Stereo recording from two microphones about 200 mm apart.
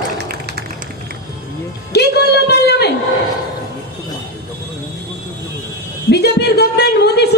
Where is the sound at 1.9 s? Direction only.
55° left (ahead or behind).